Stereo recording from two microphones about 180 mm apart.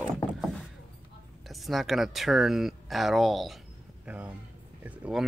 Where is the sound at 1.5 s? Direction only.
Centre (ahead or behind).